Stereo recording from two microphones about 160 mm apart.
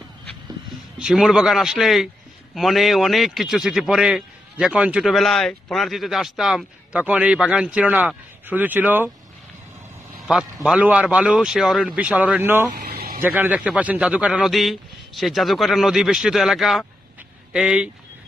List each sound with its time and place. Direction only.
0.9 s a man's voice: 5° right (ahead or behind)
10.2 s a man's voice: 5° right (ahead or behind)
12.7 s vehicle: 70° right (ahead or behind)
13.2 s a man's voice: 10° right (ahead or behind)